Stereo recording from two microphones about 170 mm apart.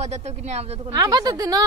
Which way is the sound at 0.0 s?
40° right (ahead or behind).